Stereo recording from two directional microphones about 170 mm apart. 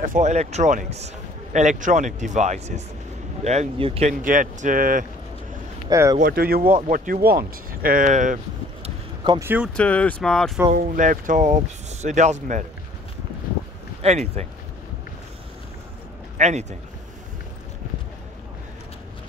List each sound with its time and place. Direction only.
0.0 s a man's voice: 50° right (ahead or behind)
4.1 s a man's voice: 50° right (ahead or behind)
5.9 s speech: 20° right (ahead or behind)
6.1 s speech: 60° right (ahead or behind)
8.8 s a sound: 25° right (ahead or behind)
9.4 s speech: 10° right (ahead or behind)
9.8 s speech: 10° left (ahead or behind)
10.7 s a man's voice: 50° right (ahead or behind)
14.0 s speech: 40° right (ahead or behind)
16.3 s speech: 40° right (ahead or behind)